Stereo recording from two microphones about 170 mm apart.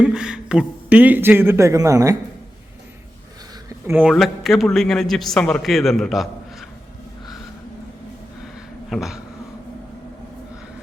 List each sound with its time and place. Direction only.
0.0 s a man's voice: 5° right (ahead or behind)
3.8 s a man's voice: 10° right (ahead or behind)
4.1 s a man's voice: centre (ahead or behind)
8.9 s speech: centre (ahead or behind)